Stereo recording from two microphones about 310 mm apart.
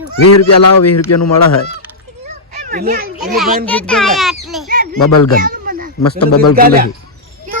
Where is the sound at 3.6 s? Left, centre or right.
Centre.